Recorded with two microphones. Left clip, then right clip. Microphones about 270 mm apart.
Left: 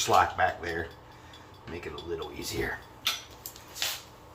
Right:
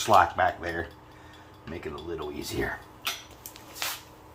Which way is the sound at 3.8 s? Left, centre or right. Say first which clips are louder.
Left 1 dB; centre.